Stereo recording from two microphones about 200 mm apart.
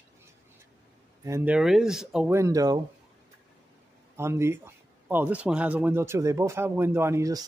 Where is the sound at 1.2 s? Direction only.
10° right (ahead or behind).